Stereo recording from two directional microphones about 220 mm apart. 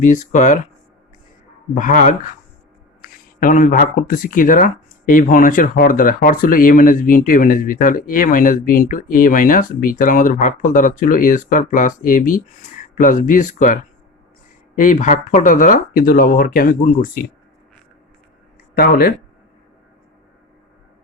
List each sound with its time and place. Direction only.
0.0 s speech: 35° left (ahead or behind)
1.7 s speech: 35° left (ahead or behind)
14.8 s speech: 35° left (ahead or behind)
18.7 s speech: 45° left (ahead or behind)